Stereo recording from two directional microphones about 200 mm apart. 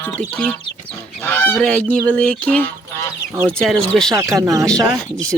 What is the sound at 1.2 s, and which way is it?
Goose, 10° left (ahead or behind).